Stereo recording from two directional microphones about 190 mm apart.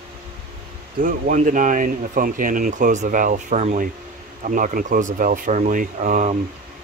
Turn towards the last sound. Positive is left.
turn(degrees=-40)  # may be behind; listen again after turning